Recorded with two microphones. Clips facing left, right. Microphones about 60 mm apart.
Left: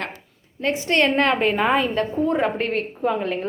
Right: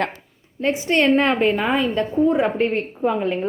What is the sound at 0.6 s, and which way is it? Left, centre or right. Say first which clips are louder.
Speech: right 2 dB; centre.